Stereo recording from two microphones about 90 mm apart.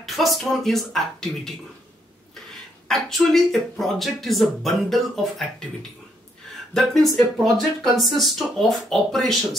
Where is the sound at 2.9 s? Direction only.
5° left (ahead or behind).